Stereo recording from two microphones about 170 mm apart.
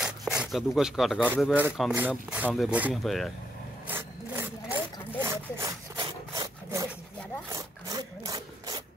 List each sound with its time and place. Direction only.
0.0 s speech: 5° right (ahead or behind)
3.8 s rub: 10° right (ahead or behind)
5.2 s sawing: 15° right (ahead or behind)
7.5 s wood: 20° right (ahead or behind)